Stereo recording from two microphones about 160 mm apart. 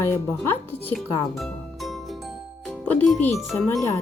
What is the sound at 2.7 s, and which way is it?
Speech, 5° left (ahead or behind).